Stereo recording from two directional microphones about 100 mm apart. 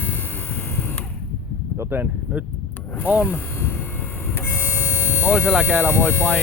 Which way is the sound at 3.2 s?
20° left (ahead or behind).